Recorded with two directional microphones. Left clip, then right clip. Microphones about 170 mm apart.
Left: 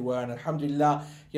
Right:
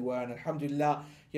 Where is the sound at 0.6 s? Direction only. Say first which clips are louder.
Left 6 dB; 25° right (ahead or behind).